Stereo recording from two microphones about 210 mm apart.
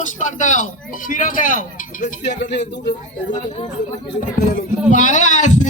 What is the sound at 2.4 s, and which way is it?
Speech, 55° left (ahead or behind).